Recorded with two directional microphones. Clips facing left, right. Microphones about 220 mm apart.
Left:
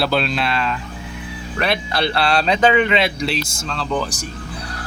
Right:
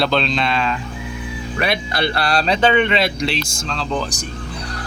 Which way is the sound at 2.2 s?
40° right (ahead or behind).